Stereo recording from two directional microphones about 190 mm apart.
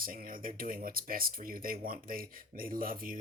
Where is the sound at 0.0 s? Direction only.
50° right (ahead or behind).